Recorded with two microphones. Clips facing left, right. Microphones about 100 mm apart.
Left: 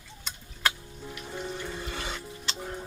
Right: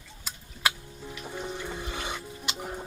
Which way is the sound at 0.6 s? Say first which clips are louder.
Even; 10° right (ahead or behind).